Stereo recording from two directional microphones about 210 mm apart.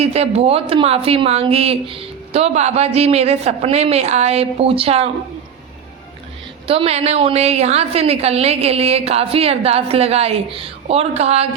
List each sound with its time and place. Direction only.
0.0 s a woman's voice: 30° right (ahead or behind)
6.7 s a woman's voice: 30° right (ahead or behind)